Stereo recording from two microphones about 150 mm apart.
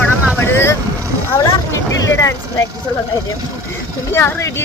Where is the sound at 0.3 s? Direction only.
15° left (ahead or behind).